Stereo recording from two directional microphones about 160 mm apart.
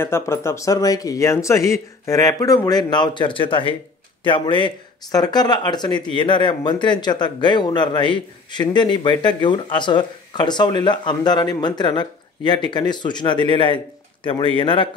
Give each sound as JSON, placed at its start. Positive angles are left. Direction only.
{"t": 0.0, "sound": "a man's voice", "side_deg": 15}